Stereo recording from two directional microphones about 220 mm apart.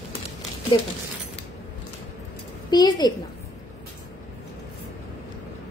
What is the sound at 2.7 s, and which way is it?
Speech, 20° left (ahead or behind).